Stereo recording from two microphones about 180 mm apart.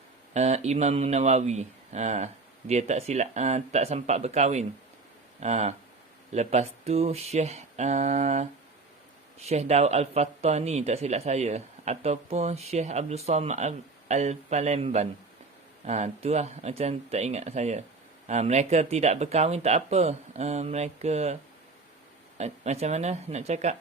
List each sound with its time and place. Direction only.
0.3 s speech: 35° right (ahead or behind)
22.4 s speech: 35° right (ahead or behind)